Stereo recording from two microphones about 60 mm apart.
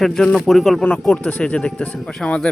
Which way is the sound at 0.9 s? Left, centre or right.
Centre.